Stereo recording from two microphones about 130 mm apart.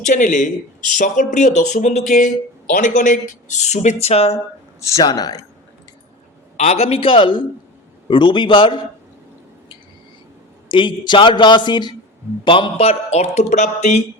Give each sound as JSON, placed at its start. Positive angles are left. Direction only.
{"t": 0.0, "sound": "speech", "side_deg": 70}
{"t": 2.6, "sound": "speech", "side_deg": 85}
{"t": 4.8, "sound": "a man's voice", "side_deg": 25}
{"t": 6.6, "sound": "a man's voice", "side_deg": 55}
{"t": 10.7, "sound": "a man's voice", "side_deg": 40}